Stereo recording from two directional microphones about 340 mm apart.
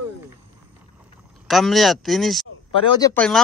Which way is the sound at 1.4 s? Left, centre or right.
Centre.